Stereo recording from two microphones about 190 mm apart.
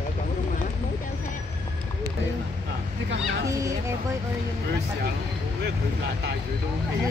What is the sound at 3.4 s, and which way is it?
Children playing, 15° right (ahead or behind).